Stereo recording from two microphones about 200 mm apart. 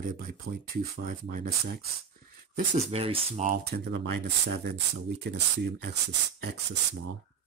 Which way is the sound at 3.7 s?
55° right (ahead or behind).